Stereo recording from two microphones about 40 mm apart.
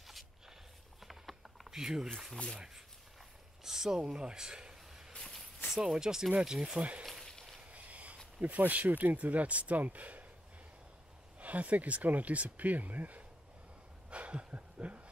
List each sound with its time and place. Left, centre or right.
1.0 s pulleys: centre
1.7 s speech: centre
2.3 s speech: left
3.6 s a sound: centre
4.0 s speech: right
5.1 s a sound: centre
5.9 s speech: centre
6.8 s speech: right
7.7 s a sound: right
8.4 s speech: right
11.3 s speech: right
14.1 s a sound: right